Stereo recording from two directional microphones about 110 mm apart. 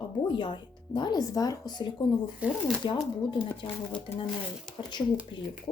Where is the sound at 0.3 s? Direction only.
45° left (ahead or behind).